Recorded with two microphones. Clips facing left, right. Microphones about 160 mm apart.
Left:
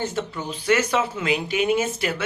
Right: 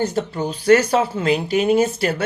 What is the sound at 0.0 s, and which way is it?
Speech, 40° right (ahead or behind).